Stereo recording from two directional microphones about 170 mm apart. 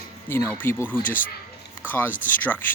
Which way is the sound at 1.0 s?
50° left (ahead or behind).